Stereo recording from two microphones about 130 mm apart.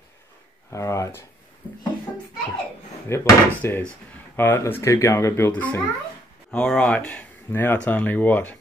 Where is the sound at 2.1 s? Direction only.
10° left (ahead or behind).